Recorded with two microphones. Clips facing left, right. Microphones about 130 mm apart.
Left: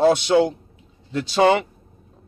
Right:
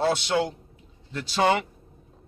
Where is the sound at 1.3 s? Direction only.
80° left.